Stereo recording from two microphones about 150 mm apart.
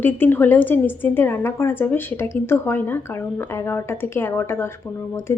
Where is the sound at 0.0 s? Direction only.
15° left (ahead or behind).